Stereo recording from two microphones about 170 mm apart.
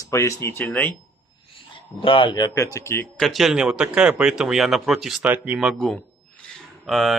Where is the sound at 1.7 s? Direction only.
30° left (ahead or behind).